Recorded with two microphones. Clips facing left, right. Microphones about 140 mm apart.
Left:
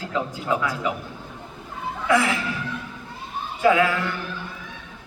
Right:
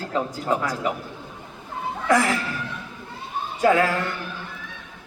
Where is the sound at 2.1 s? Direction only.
40° right (ahead or behind).